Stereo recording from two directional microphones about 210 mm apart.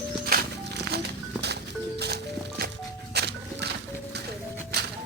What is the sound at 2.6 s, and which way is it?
Music, 50° right (ahead or behind).